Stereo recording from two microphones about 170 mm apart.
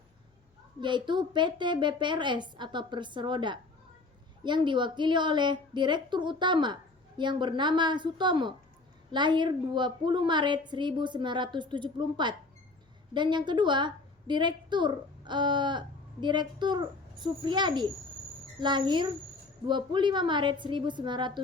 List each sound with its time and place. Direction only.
0.8 s a woman's voice: 25° right (ahead or behind)